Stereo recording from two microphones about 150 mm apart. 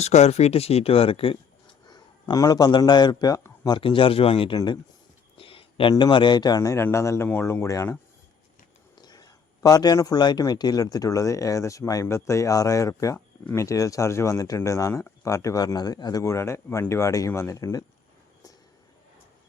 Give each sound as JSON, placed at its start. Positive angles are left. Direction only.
{"t": 0.0, "sound": "speech", "side_deg": 45}
{"t": 1.9, "sound": "a man's voice", "side_deg": 25}
{"t": 3.8, "sound": "speech", "side_deg": 35}
{"t": 5.4, "sound": "a sound", "side_deg": 35}
{"t": 5.9, "sound": "a man's voice", "side_deg": 30}
{"t": 9.0, "sound": "a man's voice", "side_deg": 25}